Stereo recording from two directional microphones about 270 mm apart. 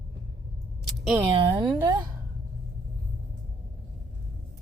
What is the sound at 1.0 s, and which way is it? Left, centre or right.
Speech, centre.